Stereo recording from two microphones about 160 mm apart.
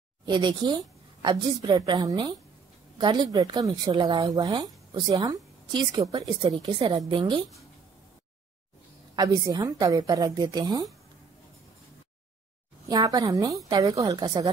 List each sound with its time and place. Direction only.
0.2 s a woman's voice: 30° right (ahead or behind)
9.1 s a woman's voice: 25° right (ahead or behind)
12.8 s a woman's voice: 20° right (ahead or behind)